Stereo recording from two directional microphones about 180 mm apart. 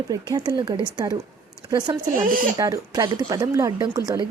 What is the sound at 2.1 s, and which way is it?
Speech, 50° right (ahead or behind).